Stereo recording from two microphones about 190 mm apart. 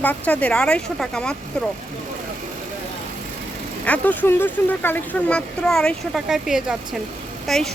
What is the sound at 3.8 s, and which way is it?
A woman's voice, 10° left (ahead or behind).